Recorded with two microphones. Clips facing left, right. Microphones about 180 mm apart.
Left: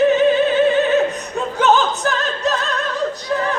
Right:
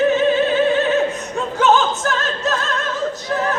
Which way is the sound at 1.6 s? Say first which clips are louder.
Even; centre (ahead or behind).